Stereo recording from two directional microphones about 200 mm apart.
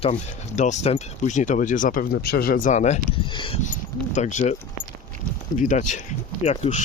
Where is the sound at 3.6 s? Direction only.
35° left (ahead or behind).